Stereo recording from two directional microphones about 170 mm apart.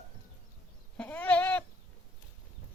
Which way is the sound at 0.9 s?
10° left (ahead or behind).